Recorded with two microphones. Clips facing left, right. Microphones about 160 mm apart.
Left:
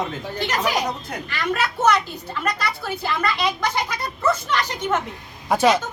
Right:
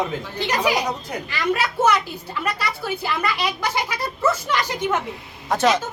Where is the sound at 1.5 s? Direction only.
10° right (ahead or behind).